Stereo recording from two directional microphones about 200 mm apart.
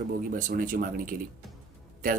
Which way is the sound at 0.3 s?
40° right (ahead or behind).